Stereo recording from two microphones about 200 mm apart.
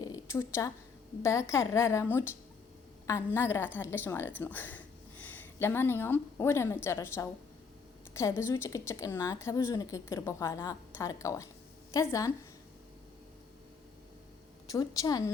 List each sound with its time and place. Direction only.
0.0 s a sound: 15° left (ahead or behind)
1.2 s a woman's voice: 15° left (ahead or behind)
14.7 s a woman's voice: 20° left (ahead or behind)